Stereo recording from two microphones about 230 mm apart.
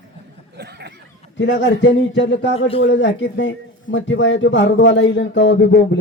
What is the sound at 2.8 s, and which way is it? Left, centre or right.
Speech, left.